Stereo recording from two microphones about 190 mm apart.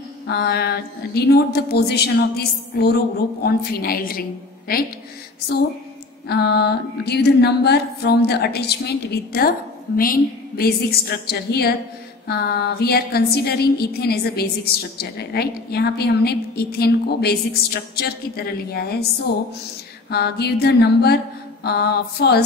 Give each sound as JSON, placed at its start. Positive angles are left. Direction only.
{"t": 0.3, "sound": "a woman's voice", "side_deg": 60}
{"t": 6.2, "sound": "a woman's voice", "side_deg": 60}